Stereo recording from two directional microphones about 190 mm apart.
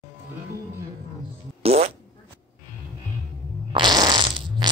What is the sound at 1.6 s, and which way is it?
Fart, 35° right (ahead or behind).